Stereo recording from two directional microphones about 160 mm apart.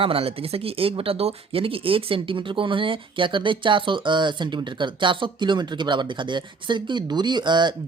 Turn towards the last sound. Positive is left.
turn(degrees=-30)  # may be behind; listen again after turning